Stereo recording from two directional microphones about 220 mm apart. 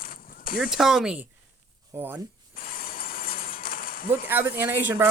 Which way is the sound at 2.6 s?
40° left (ahead or behind).